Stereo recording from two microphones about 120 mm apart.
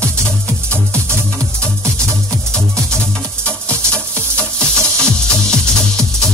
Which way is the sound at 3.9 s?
10° left (ahead or behind).